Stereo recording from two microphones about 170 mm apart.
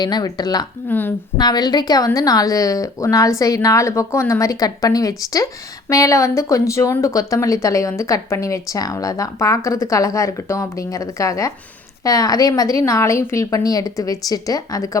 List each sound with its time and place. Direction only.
0.0 s a woman's voice: 25° left (ahead or behind)
0.9 s a woman's voice: 10° left (ahead or behind)
1.4 s a woman's voice: 25° left (ahead or behind)